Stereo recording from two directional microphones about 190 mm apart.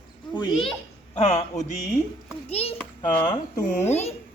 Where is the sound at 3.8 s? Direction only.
35° left (ahead or behind).